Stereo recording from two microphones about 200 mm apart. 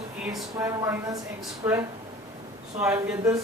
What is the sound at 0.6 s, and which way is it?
A woman's voice, 15° right (ahead or behind).